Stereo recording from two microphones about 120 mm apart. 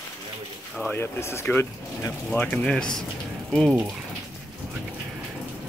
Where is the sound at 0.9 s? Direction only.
20° left (ahead or behind).